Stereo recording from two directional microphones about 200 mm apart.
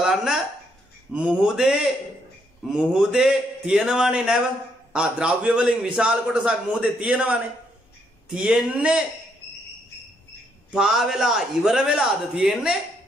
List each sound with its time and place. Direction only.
0.0 s a sound: centre (ahead or behind)
1.1 s a man's voice: 5° right (ahead or behind)
10.7 s a man's voice: centre (ahead or behind)